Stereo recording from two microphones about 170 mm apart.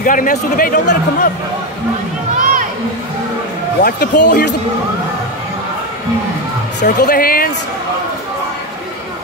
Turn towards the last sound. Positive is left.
turn(degrees=60)  # may be behind; listen again after turning